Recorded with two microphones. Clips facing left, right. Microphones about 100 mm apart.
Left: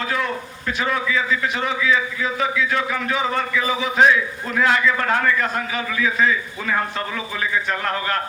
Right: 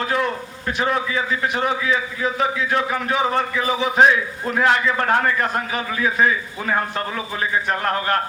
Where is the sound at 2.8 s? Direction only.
30° right (ahead or behind).